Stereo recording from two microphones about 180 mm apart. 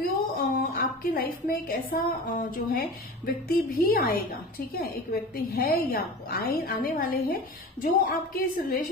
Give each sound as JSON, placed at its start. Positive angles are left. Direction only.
{"t": 0.0, "sound": "a woman's voice", "side_deg": 55}